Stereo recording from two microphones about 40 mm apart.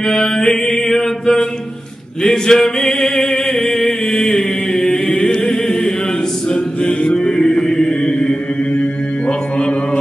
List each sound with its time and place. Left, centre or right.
0.0 s mantra: centre
2.2 s music: centre
3.0 s chant: centre
5.0 s choir: left
6.5 s chant: left